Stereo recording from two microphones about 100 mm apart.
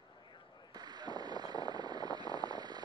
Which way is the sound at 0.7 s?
45° right (ahead or behind).